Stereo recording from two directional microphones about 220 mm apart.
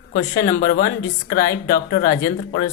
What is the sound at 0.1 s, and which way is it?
Speech, 40° left (ahead or behind).